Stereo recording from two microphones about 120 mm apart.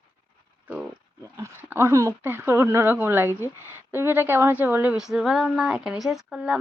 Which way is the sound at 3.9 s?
20° right (ahead or behind).